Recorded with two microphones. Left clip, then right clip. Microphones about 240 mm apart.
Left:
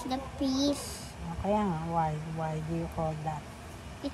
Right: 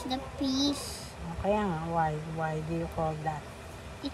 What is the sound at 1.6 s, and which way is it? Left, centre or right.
Speech, right.